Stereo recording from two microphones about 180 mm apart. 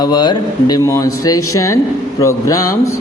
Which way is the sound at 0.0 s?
25° left (ahead or behind).